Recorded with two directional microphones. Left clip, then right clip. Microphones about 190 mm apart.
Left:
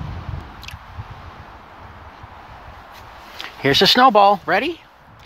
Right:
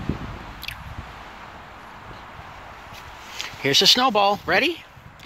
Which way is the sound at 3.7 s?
35° left (ahead or behind).